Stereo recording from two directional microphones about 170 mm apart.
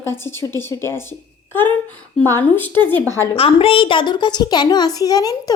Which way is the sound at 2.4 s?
10° left (ahead or behind).